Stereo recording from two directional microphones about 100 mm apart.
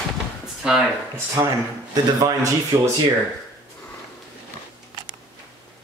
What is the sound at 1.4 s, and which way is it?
Speech, 30° right (ahead or behind).